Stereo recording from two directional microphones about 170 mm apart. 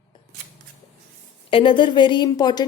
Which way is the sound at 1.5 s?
30° left (ahead or behind).